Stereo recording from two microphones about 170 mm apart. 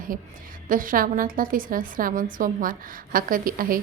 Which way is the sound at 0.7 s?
55° right (ahead or behind).